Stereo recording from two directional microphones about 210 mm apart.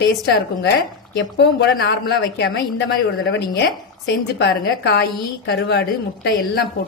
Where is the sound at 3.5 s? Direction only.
55° left (ahead or behind).